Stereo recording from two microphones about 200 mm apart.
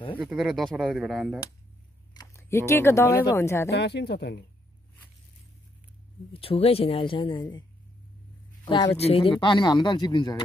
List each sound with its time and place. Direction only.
0.2 s speech: 5° right (ahead or behind)
2.1 s speech: 15° left (ahead or behind)
3.7 s speech: 55° left (ahead or behind)
6.3 s speech: 30° left (ahead or behind)
8.6 s speech: 20° left (ahead or behind)